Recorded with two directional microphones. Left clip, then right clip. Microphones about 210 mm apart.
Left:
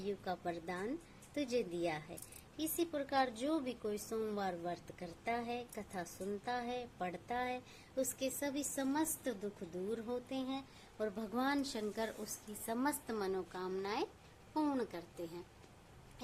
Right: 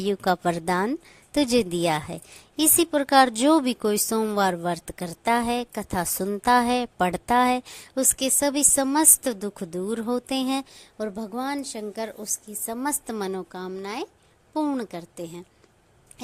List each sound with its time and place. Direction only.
0.0 s a woman's voice: 50° right (ahead or behind)
10.9 s a woman's voice: 35° right (ahead or behind)